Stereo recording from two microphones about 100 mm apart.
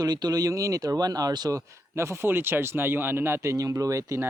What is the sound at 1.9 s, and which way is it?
Speech, 25° right (ahead or behind).